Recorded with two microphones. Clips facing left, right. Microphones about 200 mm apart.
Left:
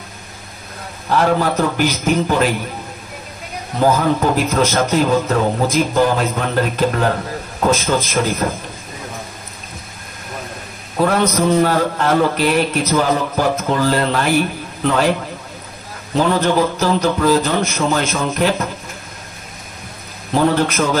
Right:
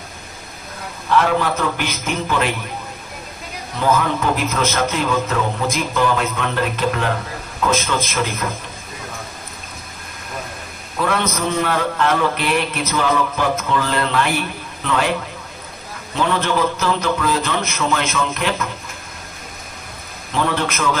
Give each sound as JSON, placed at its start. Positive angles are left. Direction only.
{"t": 1.0, "sound": "a man's voice", "side_deg": 40}
{"t": 3.8, "sound": "a man's voice", "side_deg": 40}
{"t": 11.0, "sound": "a man's voice", "side_deg": 35}
{"t": 16.2, "sound": "a man's voice", "side_deg": 40}
{"t": 20.3, "sound": "a man's voice", "side_deg": 40}